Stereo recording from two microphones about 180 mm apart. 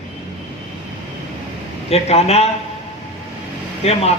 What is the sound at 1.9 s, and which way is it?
Speech, 35° left (ahead or behind).